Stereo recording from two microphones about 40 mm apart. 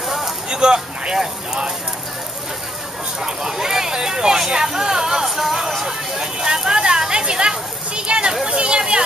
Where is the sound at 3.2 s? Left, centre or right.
Centre.